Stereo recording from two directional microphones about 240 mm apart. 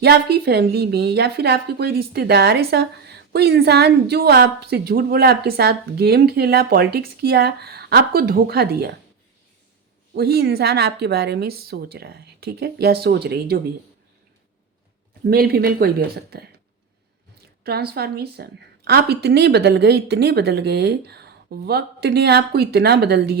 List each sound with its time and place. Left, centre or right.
0.0 s a woman's voice: right
10.2 s a woman's voice: right
15.2 s a woman's voice: right
17.6 s a woman's voice: right